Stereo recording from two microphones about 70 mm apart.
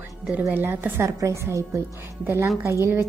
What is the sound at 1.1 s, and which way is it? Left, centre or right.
Speech, right.